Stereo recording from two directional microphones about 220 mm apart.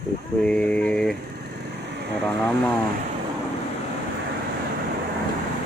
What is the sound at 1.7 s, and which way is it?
Vehicle, 50° right (ahead or behind).